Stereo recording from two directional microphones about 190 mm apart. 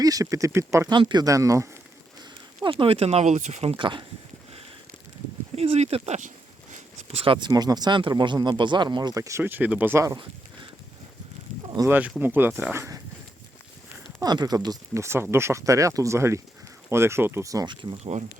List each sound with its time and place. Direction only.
0.0 s speech: 20° right (ahead or behind)
2.6 s speech: 30° right (ahead or behind)
5.5 s speech: 35° right (ahead or behind)
11.7 s speech: 15° right (ahead or behind)
14.2 s speech: 20° right (ahead or behind)